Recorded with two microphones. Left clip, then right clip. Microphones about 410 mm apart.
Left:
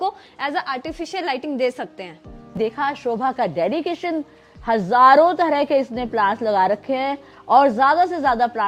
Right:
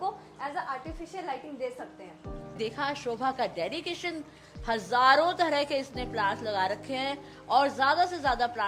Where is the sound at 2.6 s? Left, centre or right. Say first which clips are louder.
Left 10 dB; left.